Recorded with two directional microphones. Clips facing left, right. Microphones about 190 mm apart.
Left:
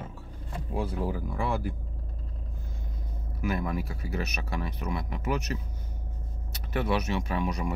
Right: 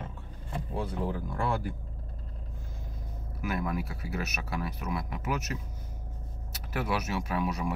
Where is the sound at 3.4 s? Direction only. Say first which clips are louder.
Left 2 dB; centre (ahead or behind).